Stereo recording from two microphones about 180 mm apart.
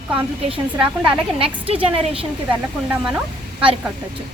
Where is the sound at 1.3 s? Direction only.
30° right (ahead or behind).